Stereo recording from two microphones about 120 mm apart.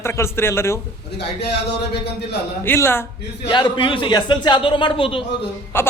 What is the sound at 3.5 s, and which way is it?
Speech, 40° left (ahead or behind).